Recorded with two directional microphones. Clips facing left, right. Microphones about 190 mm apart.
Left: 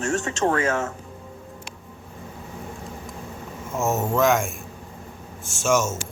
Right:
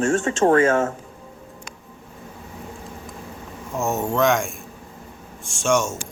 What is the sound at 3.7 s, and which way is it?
Speech, centre (ahead or behind).